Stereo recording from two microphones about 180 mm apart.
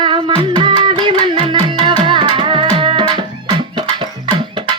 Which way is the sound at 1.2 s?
30° right (ahead or behind).